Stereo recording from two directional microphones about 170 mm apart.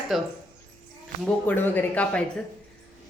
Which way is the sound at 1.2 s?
10° left (ahead or behind).